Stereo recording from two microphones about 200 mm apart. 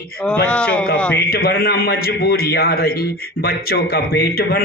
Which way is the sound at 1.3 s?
50° left (ahead or behind).